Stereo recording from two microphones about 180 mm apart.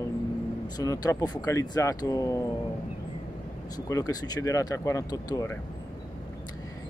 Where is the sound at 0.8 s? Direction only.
20° left (ahead or behind).